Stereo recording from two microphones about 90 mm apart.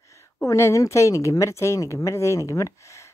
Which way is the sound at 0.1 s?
35° left (ahead or behind).